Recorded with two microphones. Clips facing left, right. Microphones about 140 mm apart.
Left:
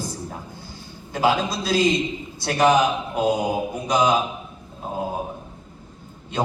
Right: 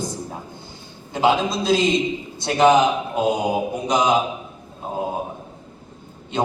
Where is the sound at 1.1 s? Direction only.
20° right (ahead or behind).